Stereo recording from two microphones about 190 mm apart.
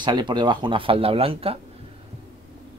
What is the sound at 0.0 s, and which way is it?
Speech, 25° right (ahead or behind).